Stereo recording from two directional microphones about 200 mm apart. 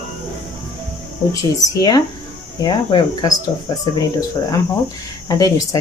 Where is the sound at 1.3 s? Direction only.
15° left (ahead or behind).